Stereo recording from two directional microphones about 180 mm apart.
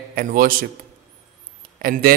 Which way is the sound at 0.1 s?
55° right (ahead or behind).